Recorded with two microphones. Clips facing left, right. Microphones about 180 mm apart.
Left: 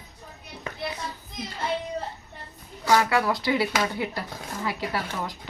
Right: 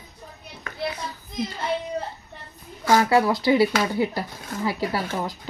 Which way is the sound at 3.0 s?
30° right (ahead or behind).